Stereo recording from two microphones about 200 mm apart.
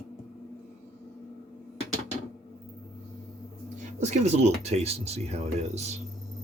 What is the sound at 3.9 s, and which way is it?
Speech, 35° right (ahead or behind).